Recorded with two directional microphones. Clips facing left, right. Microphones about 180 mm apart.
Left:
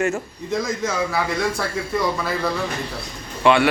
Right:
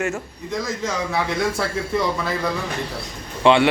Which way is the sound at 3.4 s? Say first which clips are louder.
Right 1 dB; 20° right (ahead or behind).